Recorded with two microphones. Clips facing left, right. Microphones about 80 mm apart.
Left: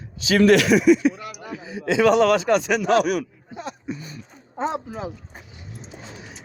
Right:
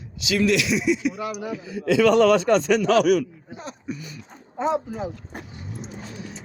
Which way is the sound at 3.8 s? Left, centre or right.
Left.